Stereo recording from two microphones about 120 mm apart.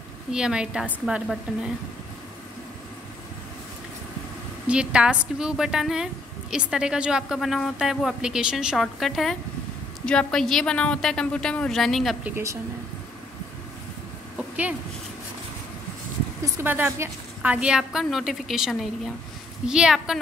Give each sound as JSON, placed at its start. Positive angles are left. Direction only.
{"t": 0.3, "sound": "a woman's voice", "side_deg": -5}
{"t": 4.6, "sound": "a woman's voice", "side_deg": -10}
{"t": 12.2, "sound": "speech", "side_deg": -20}
{"t": 16.6, "sound": "a woman's voice", "side_deg": -15}